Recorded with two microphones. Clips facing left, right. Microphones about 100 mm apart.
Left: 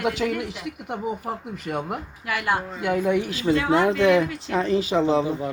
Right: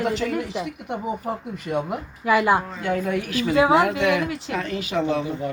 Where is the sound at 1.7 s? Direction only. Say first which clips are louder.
Right 3 dB; centre (ahead or behind).